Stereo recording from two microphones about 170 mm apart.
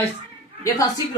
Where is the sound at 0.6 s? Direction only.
20° left (ahead or behind).